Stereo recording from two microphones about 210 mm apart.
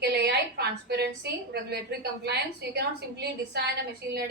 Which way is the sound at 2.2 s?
50° right (ahead or behind).